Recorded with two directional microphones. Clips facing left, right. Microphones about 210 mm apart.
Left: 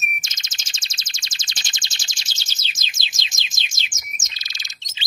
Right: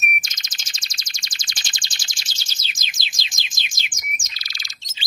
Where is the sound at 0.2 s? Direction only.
25° left (ahead or behind).